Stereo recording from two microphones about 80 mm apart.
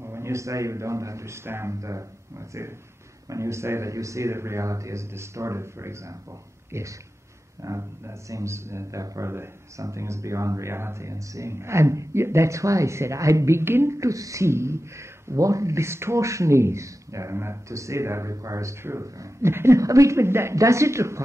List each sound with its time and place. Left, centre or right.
0.0 s a man's voice: right